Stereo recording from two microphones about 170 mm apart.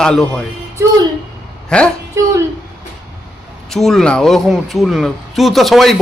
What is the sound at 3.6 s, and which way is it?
Speech, centre (ahead or behind).